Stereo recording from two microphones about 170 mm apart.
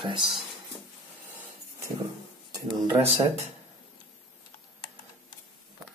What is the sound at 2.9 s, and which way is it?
Speech, 15° right (ahead or behind).